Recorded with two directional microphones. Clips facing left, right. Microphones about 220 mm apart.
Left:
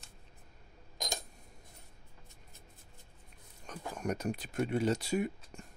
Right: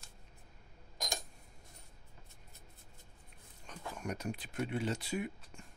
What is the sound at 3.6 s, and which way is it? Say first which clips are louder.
Speech: left 5 dB; 45° left (ahead or behind).